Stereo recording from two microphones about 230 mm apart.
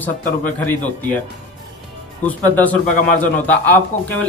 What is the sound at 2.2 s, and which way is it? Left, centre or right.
Speech, centre.